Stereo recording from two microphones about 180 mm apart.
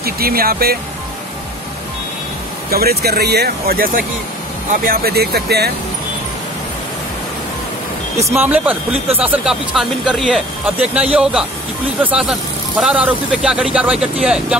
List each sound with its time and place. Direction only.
0.0 s speech: 55° right (ahead or behind)
2.7 s speech: 60° right (ahead or behind)
8.2 s speech: 15° right (ahead or behind)